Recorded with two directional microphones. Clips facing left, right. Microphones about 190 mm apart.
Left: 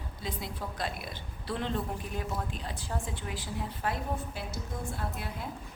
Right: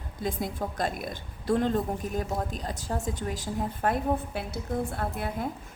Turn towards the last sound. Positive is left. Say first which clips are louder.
# right 7 dB
turn(degrees=-55)  # may be behind; listen again after turning